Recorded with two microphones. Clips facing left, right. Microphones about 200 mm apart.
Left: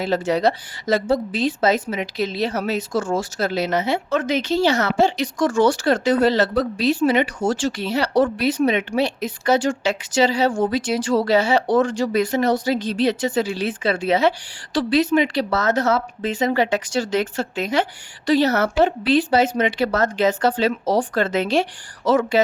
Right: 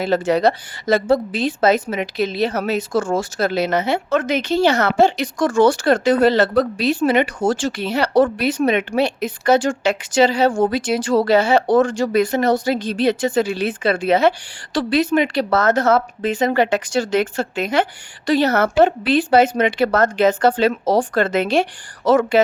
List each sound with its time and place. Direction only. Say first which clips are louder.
0.0 s a woman's voice: right 3 dB; 55° right (ahead or behind)